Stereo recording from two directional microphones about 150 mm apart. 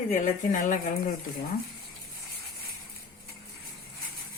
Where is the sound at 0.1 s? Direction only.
55° left (ahead or behind).